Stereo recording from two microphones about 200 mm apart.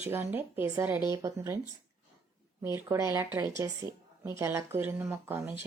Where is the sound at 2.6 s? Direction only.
15° right (ahead or behind).